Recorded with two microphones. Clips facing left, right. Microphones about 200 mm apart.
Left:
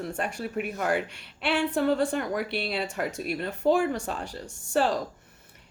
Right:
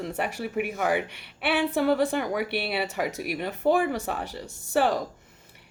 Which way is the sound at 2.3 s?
65° right (ahead or behind).